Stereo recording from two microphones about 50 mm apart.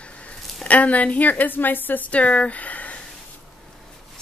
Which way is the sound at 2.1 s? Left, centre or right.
Left.